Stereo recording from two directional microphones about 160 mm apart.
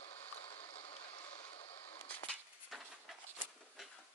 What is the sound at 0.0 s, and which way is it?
Mechanisms, 40° left (ahead or behind).